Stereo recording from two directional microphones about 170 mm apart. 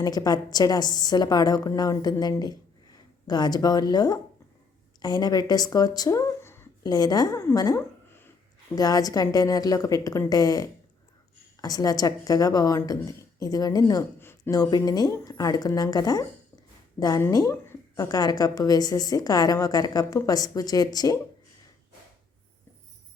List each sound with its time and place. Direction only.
0.0 s a woman's voice: 20° left (ahead or behind)
17.2 s a woman's voice: 20° left (ahead or behind)